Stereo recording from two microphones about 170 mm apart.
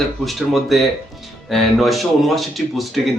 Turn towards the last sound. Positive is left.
turn(degrees=0)  # may be behind; listen again after turning